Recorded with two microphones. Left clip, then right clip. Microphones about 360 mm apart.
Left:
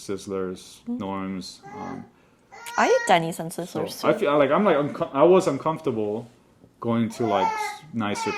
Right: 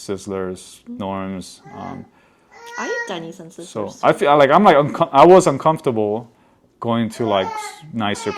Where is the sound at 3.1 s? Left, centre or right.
Left.